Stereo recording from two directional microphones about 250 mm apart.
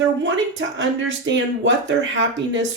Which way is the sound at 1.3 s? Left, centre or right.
Right.